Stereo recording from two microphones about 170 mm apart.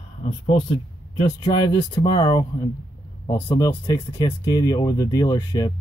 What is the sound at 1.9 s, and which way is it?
Speech, 25° left (ahead or behind).